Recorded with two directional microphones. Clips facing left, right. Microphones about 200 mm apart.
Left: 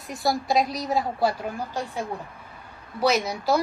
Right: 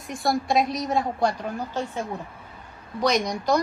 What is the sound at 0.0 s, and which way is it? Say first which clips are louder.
A woman's voice: right 1 dB; centre (ahead or behind).